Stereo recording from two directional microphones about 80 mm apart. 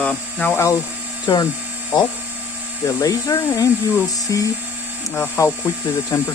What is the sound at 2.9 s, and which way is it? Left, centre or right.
Speech, left.